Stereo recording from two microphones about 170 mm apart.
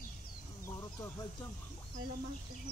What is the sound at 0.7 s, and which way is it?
Chicken, 20° left (ahead or behind).